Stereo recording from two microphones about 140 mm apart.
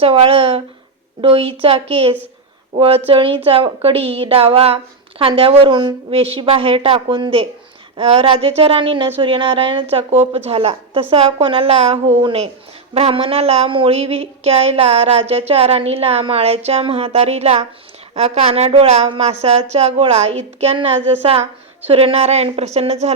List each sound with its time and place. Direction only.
0.0 s a woman's voice: 40° right (ahead or behind)